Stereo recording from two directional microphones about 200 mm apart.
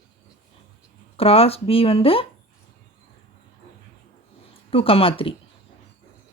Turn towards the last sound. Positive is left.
turn(degrees=25)  # may be behind; listen again after turning